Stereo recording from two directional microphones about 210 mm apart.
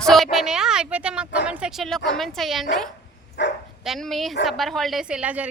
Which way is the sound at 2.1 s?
Centre (ahead or behind).